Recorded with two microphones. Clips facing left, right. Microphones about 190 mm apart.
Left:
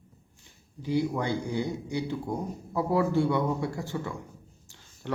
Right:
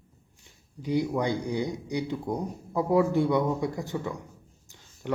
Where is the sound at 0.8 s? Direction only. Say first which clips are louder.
Right 1 dB; 20° right (ahead or behind).